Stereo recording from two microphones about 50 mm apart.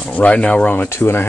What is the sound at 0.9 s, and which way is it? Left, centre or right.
Speech, left.